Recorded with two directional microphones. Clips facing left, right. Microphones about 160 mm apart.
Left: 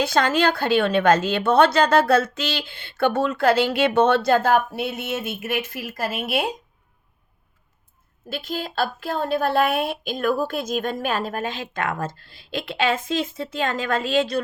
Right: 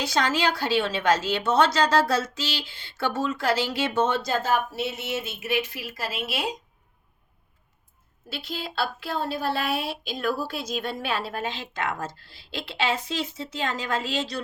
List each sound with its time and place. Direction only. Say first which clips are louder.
0.0 s a woman's voice: left 5 dB; 55° left (ahead or behind)
8.3 s speech: left 5 dB; 50° left (ahead or behind)